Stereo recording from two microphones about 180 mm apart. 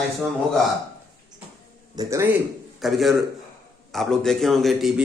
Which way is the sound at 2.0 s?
15° right (ahead or behind).